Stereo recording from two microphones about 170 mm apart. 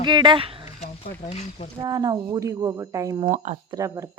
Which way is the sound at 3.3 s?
45° right (ahead or behind).